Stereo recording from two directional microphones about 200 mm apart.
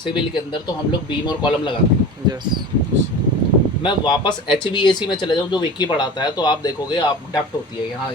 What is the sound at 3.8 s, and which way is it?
Speech, 25° left (ahead or behind).